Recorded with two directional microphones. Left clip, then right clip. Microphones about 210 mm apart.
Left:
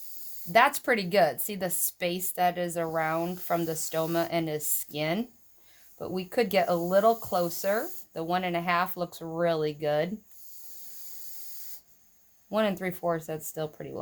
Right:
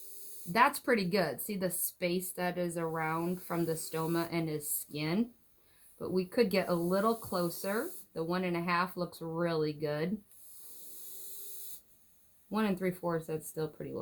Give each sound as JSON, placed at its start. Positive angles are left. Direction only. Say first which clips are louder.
{"t": 0.5, "sound": "a woman's voice", "louder": "left 5 dB", "side_deg": 50}
{"t": 12.5, "sound": "a woman's voice", "louder": "left 6 dB", "side_deg": 50}